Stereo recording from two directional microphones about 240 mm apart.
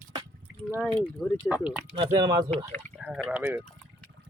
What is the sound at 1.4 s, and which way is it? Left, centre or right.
Speech, centre.